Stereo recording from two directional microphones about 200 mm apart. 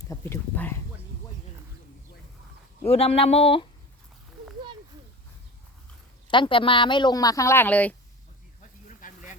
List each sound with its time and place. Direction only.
0.0 s speech: 15° left (ahead or behind)
2.8 s speech: 30° left (ahead or behind)
6.3 s speech: 25° left (ahead or behind); by 7.9 s 5° left (ahead or behind)
9.0 s a sound: 40° left (ahead or behind)